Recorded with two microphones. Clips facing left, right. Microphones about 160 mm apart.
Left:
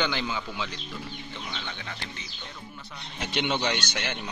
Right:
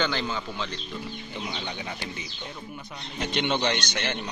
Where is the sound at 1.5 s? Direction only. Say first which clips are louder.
Right 4 dB; 15° right (ahead or behind).